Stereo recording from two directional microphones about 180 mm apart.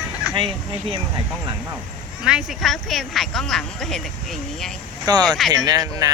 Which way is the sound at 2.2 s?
5° right (ahead or behind).